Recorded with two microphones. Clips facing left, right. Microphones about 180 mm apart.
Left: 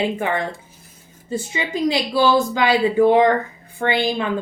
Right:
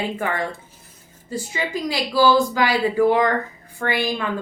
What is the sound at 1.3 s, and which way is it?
Speech, 25° left (ahead or behind).